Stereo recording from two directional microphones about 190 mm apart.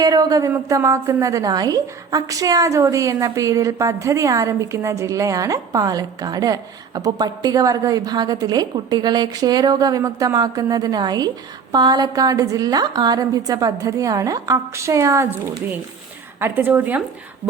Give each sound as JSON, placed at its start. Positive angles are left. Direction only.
{"t": 0.0, "sound": "a woman's voice", "side_deg": -20}